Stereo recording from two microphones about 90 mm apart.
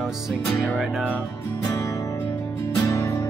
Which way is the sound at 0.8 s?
10° right (ahead or behind).